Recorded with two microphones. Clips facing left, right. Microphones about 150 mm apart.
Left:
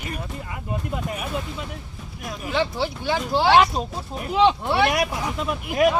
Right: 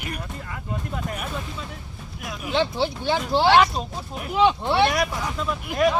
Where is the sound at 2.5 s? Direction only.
25° right (ahead or behind).